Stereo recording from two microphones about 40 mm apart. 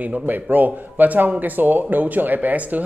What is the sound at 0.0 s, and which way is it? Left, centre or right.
Speech, right.